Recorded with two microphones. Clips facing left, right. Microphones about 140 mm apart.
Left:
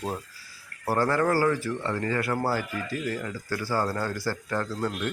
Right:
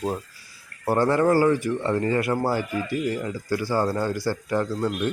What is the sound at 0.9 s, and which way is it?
Speech, 20° right (ahead or behind).